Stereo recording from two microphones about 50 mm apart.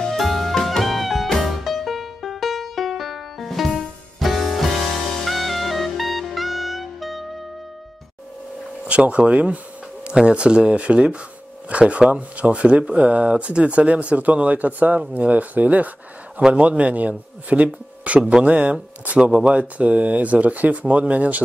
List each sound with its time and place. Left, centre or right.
0.2 s music: centre
8.8 s speech: right
16.3 s speech: right